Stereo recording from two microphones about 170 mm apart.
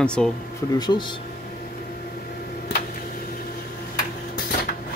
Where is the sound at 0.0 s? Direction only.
5° left (ahead or behind).